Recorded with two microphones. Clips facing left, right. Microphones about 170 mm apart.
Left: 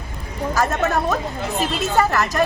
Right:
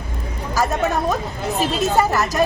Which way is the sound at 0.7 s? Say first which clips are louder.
Right 1 dB; 15° right (ahead or behind).